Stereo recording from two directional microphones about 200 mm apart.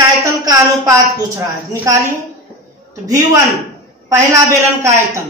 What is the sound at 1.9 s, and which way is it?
Speech, 15° right (ahead or behind).